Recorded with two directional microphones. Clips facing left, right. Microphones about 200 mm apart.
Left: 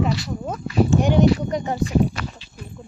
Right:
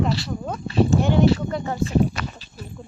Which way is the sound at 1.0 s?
15° left (ahead or behind).